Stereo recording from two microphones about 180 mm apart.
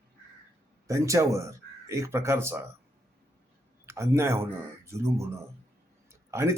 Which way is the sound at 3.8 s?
15° right (ahead or behind).